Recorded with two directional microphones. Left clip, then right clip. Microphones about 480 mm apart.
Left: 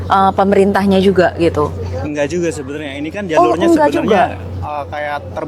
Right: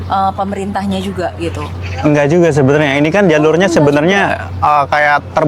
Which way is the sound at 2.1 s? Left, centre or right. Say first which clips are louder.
Right 7 dB; right.